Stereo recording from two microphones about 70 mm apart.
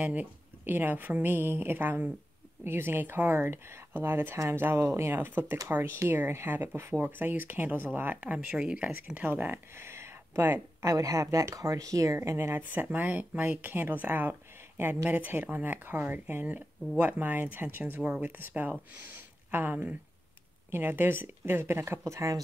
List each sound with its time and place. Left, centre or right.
0.0 s speech: right
9.0 s speech: right
10.9 s speech: right
12.2 s speech: right
12.9 s speech: right
22.0 s speech: right